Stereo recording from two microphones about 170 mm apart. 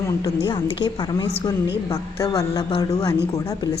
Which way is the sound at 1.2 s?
20° left (ahead or behind).